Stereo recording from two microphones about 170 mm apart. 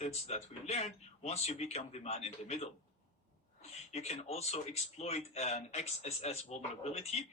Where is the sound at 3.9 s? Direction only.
40° left (ahead or behind).